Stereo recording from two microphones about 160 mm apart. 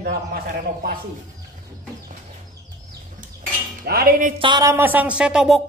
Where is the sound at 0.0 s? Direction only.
75° right (ahead or behind).